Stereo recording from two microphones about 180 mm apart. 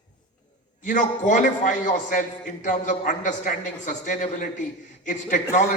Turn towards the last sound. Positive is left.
turn(degrees=45)  # may be behind; listen again after turning